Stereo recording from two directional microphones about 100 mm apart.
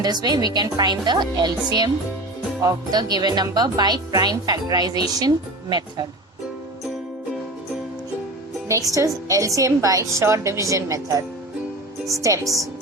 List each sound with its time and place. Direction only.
0.0 s a woman's voice: 45° right (ahead or behind)
9.0 s a woman's voice: 35° right (ahead or behind)
12.2 s a woman's voice: 30° right (ahead or behind)